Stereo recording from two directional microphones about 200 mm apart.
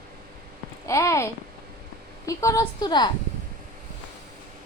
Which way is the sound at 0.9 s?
15° left (ahead or behind).